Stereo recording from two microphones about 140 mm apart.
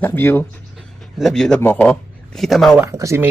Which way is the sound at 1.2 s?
5° left (ahead or behind).